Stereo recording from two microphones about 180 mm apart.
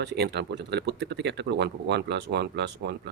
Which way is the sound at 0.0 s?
65° right (ahead or behind).